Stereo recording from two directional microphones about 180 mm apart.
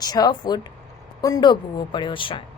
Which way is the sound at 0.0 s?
20° left (ahead or behind).